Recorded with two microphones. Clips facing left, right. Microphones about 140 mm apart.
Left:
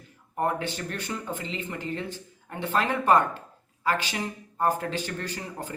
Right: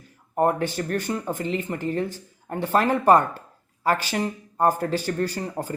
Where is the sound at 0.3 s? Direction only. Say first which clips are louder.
Right 6 dB; 45° right (ahead or behind).